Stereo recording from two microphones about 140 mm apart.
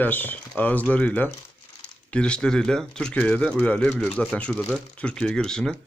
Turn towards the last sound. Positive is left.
turn(degrees=5)  # may be behind; listen again after turning